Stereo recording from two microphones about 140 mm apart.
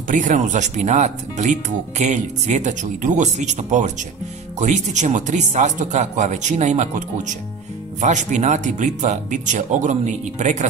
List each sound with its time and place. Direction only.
0.1 s speech: 65° right (ahead or behind)